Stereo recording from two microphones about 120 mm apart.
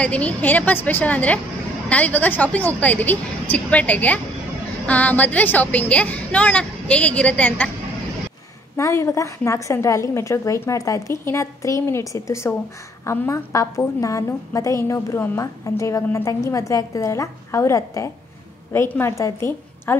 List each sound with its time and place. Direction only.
0.0 s a woman's voice: 10° left (ahead or behind)
8.7 s a woman's voice: 25° left (ahead or behind)